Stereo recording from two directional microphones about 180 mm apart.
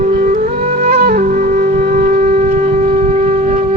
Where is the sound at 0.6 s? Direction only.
35° right (ahead or behind).